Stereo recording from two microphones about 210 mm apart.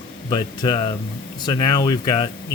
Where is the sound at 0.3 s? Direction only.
20° left (ahead or behind).